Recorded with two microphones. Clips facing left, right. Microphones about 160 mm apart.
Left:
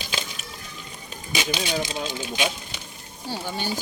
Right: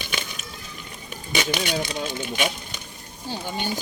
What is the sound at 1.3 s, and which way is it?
Speech, 65° right (ahead or behind).